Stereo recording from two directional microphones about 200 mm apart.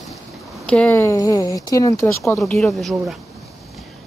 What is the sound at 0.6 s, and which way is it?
Speech, 5° left (ahead or behind).